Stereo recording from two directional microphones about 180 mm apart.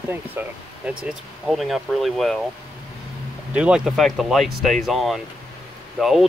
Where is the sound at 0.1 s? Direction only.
10° right (ahead or behind).